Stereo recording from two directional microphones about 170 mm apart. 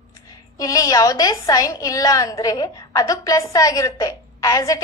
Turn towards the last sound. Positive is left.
turn(degrees=20)  # may be behind; listen again after turning